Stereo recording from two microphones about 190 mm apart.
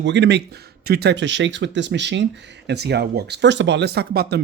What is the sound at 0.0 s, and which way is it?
Speech, 65° right (ahead or behind).